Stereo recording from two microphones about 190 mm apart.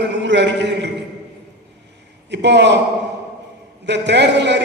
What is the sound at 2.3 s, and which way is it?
Speech, 65° right (ahead or behind).